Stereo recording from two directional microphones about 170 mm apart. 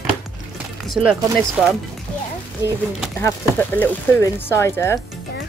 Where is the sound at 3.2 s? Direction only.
10° left (ahead or behind).